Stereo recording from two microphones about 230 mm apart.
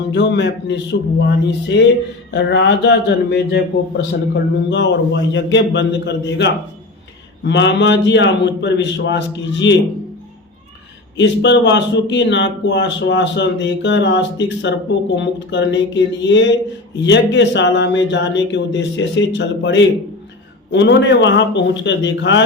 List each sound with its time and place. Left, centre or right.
0.1 s speech: left
4.7 s speech: left
11.2 s speech: left